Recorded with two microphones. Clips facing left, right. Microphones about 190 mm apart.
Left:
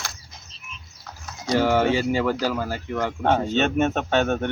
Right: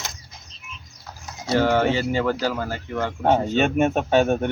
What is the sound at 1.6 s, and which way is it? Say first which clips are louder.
Speech: even; 10° left (ahead or behind).